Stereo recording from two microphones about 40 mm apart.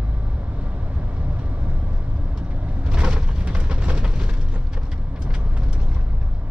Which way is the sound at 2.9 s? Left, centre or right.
Right.